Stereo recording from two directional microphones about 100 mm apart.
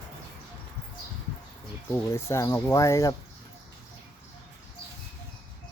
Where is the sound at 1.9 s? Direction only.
30° left (ahead or behind).